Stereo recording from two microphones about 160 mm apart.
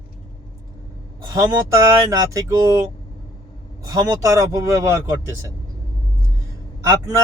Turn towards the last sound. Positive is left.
turn(degrees=-20)  # may be behind; listen again after turning